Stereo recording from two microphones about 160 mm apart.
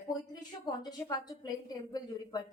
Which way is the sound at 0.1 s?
25° left (ahead or behind).